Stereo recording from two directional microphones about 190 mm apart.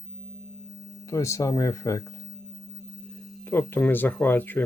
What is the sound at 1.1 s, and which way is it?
Speech, 15° left (ahead or behind).